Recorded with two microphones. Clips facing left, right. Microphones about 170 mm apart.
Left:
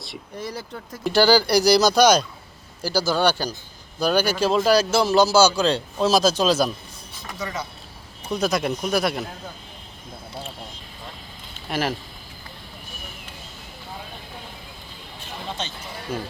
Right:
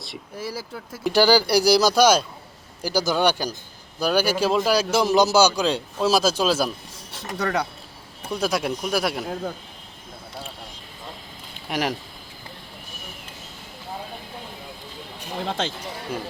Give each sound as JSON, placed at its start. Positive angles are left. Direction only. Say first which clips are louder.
{"t": 0.0, "sound": "a man's voice", "louder": "even", "side_deg": 0}
{"t": 7.3, "sound": "speech", "louder": "right 6 dB", "side_deg": -65}
{"t": 8.3, "sound": "a man's voice", "louder": "left 1 dB", "side_deg": -10}
{"t": 11.7, "sound": "a man's voice", "louder": "even", "side_deg": -15}
{"t": 15.4, "sound": "speech", "louder": "right 5 dB", "side_deg": -90}